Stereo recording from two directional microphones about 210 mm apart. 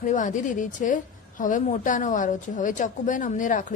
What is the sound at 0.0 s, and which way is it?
A woman's voice, 35° left (ahead or behind).